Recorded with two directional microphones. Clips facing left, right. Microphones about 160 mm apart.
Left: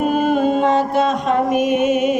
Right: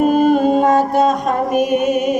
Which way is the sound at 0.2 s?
40° right (ahead or behind).